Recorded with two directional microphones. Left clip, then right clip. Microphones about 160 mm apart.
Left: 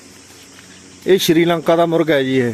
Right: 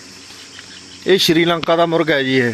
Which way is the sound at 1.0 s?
20° left (ahead or behind).